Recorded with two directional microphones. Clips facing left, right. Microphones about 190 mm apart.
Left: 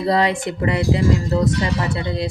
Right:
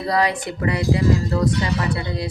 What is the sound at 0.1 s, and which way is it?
Speech, 25° left (ahead or behind).